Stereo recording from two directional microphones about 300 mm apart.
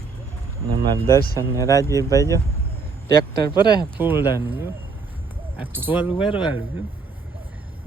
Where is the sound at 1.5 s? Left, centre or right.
Centre.